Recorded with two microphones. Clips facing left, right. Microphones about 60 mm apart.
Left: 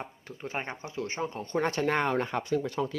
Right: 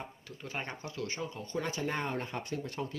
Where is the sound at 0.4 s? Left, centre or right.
Left.